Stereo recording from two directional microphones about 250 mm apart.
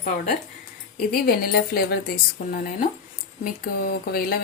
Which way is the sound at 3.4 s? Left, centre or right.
Left.